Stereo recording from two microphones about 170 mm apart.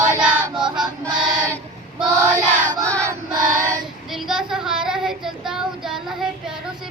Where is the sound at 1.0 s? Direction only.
20° right (ahead or behind).